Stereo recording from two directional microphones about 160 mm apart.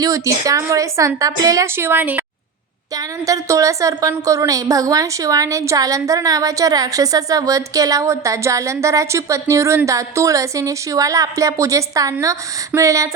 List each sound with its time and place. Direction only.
0.4 s a woman's voice: 20° right (ahead or behind)